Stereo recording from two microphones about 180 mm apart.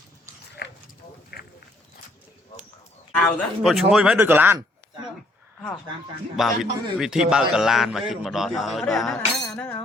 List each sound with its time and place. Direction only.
0.6 s dog: 70° left (ahead or behind)
1.3 s a sound: 60° left (ahead or behind)
3.2 s a man's voice: 5° left (ahead or behind); by 4.5 s 10° right (ahead or behind)
6.3 s a man's voice: centre (ahead or behind)